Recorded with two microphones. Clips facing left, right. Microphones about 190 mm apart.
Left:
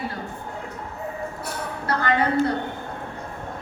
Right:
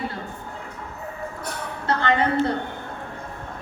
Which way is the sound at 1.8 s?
25° right (ahead or behind).